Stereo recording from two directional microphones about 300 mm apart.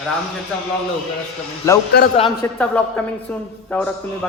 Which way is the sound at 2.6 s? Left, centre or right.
Centre.